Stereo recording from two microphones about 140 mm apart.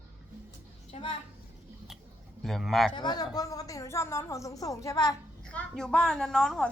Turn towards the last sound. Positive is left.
turn(degrees=5)  # may be behind; listen again after turning